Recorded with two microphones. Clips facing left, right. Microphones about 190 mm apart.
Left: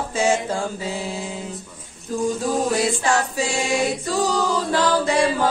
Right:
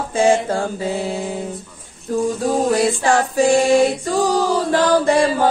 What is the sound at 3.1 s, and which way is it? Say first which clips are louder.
Mantra: right 8 dB; 55° right (ahead or behind).